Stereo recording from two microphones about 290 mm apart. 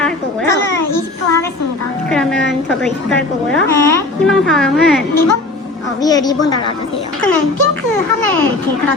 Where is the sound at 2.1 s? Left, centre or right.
Centre.